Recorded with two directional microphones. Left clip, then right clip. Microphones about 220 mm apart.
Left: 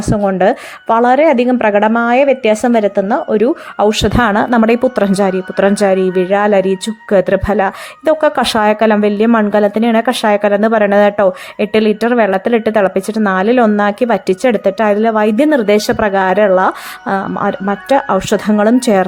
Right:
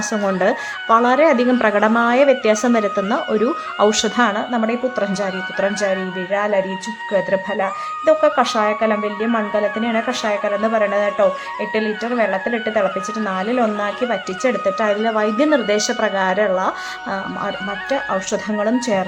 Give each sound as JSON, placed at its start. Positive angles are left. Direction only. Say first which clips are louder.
{"t": 0.3, "sound": "speech", "louder": "left 6 dB", "side_deg": 20}